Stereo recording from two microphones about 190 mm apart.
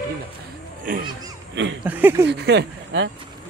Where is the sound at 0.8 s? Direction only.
45° right (ahead or behind).